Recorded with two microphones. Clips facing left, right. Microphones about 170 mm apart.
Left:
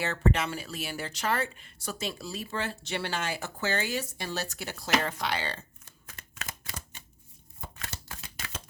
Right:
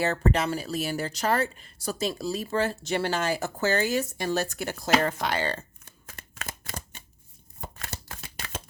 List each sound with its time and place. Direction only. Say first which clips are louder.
0.0 s speech: right 3 dB; 40° right (ahead or behind)
6.4 s shuffling cards: right 4 dB; 45° right (ahead or behind)
7.6 s chopping: right 3 dB; 45° right (ahead or behind)